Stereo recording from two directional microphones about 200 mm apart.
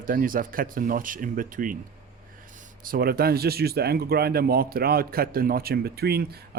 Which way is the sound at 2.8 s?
45° right (ahead or behind).